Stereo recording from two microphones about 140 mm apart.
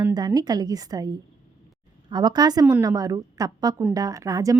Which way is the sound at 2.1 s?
30° right (ahead or behind).